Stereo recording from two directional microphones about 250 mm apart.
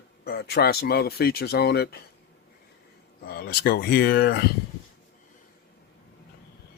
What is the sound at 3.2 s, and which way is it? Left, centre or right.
Speech, left.